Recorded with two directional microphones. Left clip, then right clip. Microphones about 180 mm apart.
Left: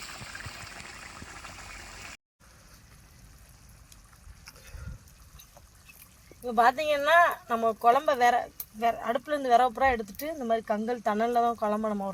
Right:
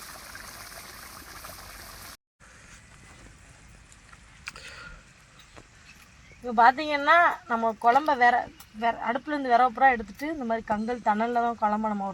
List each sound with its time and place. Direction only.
0.1 s a sound: 10° right (ahead or behind)
6.6 s speech: 35° left (ahead or behind)
10.3 s speech: 15° left (ahead or behind)
10.7 s speech: 35° left (ahead or behind)